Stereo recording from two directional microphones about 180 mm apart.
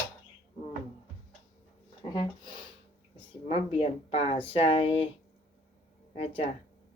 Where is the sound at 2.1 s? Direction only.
25° left (ahead or behind).